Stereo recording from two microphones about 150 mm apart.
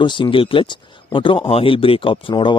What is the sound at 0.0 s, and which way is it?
Speech, 30° left (ahead or behind).